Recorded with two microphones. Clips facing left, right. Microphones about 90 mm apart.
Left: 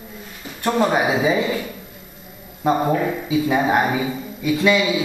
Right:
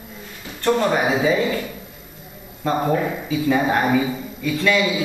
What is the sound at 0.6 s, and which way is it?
Speech, 10° left (ahead or behind).